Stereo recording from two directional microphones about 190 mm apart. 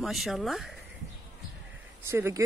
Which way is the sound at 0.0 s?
Centre (ahead or behind).